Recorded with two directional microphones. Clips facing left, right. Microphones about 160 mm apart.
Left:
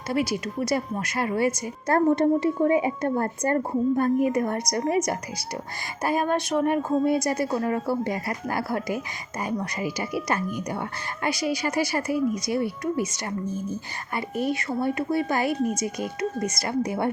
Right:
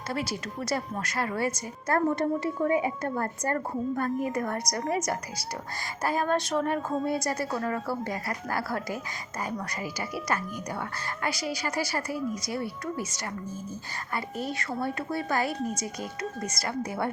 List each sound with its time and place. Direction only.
0.1 s speech: 10° left (ahead or behind)
1.9 s speech: 25° left (ahead or behind)
14.2 s speech: 15° left (ahead or behind)